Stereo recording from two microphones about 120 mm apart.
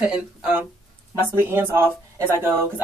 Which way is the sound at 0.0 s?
10° right (ahead or behind).